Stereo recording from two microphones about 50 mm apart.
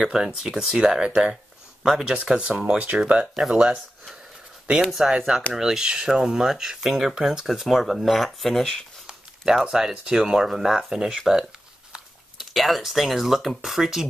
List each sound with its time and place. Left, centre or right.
0.0 s speech: centre
3.1 s speech: right
3.5 s speech: centre
5.1 s speech: centre
5.5 s speech: centre
9.4 s speech: centre